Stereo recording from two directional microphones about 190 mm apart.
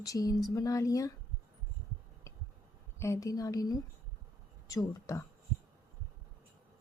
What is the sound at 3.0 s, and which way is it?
A woman's voice, 15° left (ahead or behind).